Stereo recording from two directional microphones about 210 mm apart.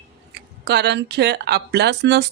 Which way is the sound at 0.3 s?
55° right (ahead or behind).